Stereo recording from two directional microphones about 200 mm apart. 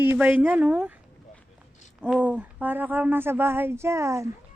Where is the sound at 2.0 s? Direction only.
5° right (ahead or behind).